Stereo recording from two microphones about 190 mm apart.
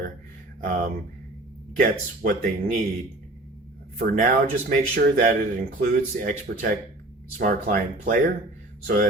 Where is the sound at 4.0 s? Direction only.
50° right (ahead or behind).